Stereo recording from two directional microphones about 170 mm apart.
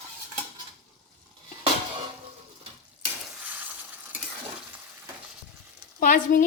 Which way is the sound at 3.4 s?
10° right (ahead or behind).